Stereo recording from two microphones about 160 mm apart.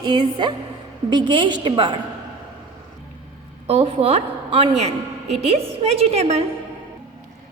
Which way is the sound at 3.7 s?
40° right (ahead or behind).